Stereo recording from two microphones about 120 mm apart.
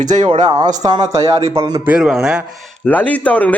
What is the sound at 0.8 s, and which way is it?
Speech, 35° right (ahead or behind).